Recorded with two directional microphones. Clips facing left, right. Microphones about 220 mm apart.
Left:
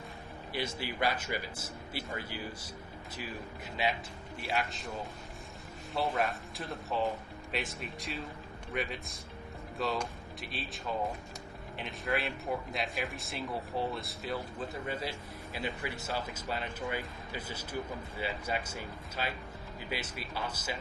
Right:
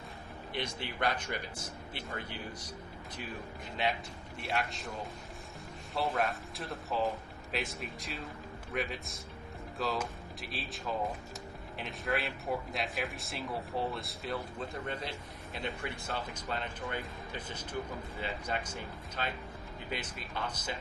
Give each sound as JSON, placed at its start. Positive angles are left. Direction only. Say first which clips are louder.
{"t": 0.5, "sound": "a man's voice", "louder": "left 2 dB", "side_deg": 5}
{"t": 3.8, "sound": "a man's voice", "louder": "even", "side_deg": 5}